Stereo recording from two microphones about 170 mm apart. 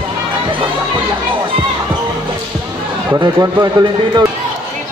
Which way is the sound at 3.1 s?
20° right (ahead or behind).